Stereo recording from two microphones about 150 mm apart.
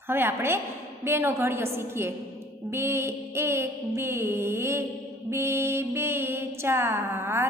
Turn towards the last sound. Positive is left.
turn(degrees=-15)  # may be behind; listen again after turning